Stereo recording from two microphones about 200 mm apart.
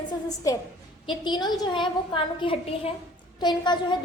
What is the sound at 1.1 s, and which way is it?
A woman's voice, 20° left (ahead or behind).